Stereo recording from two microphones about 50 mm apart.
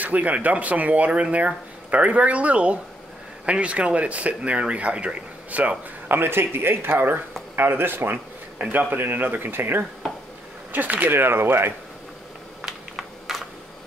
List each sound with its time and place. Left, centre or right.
0.0 s speech: right
6.0 s speech: right
10.7 s speech: right
11.1 s speech: right
12.6 s a sound: centre